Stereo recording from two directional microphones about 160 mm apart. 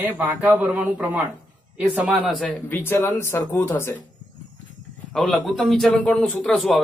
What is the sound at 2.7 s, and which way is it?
Speech, 15° left (ahead or behind).